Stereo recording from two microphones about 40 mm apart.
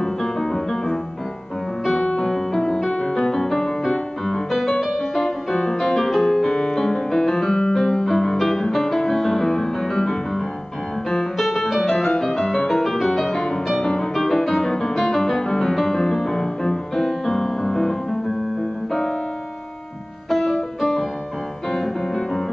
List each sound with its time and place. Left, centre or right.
0.0 s music: centre
2.0 s music: centre
7.2 s piano: centre
7.7 s music: centre
20.2 s music: centre